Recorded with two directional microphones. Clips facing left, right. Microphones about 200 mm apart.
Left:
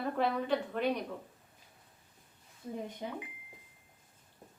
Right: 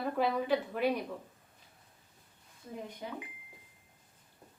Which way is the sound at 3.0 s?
25° left (ahead or behind).